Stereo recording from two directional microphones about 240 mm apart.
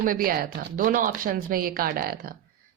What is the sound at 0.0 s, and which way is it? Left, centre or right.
Speech, right.